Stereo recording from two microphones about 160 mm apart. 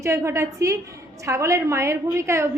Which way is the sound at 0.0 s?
20° right (ahead or behind).